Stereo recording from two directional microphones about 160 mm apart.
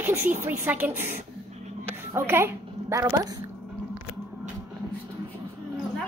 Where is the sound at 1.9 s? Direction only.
15° right (ahead or behind).